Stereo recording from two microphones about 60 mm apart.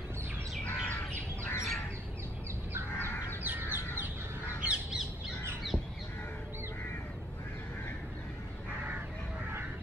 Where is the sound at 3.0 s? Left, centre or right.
Left.